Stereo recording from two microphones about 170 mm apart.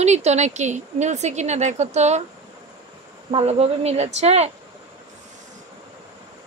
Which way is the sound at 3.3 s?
35° right (ahead or behind).